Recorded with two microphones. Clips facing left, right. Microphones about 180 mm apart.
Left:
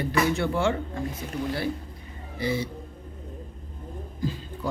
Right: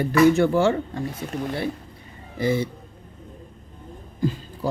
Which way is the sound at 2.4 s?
50° right (ahead or behind).